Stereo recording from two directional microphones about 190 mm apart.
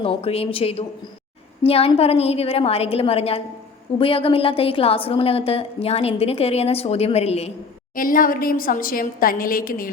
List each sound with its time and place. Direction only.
0.0 s a woman's voice: 30° left (ahead or behind)
7.9 s a woman's voice: 45° left (ahead or behind)